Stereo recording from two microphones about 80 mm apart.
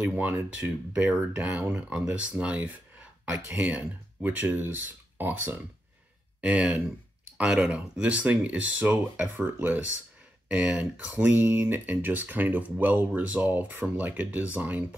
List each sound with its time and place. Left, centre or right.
0.0 s speech: right
1.3 s speech: centre